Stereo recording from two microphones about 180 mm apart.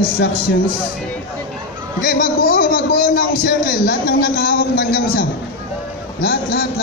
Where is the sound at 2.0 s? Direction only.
55° left (ahead or behind).